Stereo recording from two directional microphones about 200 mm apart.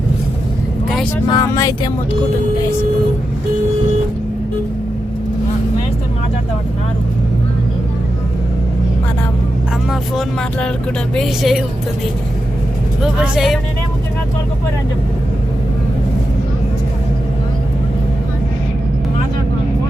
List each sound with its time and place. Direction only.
1.1 s speech: 15° left (ahead or behind)
9.9 s speech: centre (ahead or behind)
13.0 s speech: 5° right (ahead or behind)